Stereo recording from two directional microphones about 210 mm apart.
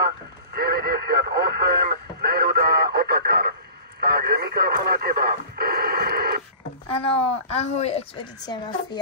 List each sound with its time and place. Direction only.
0.6 s radio: 45° right (ahead or behind)
7.4 s a woman's voice: 30° left (ahead or behind)